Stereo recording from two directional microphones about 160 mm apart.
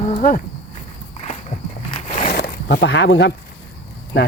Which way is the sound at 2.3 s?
90° left.